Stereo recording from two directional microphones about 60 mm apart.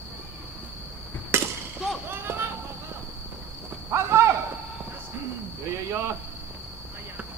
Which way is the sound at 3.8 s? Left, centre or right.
Right.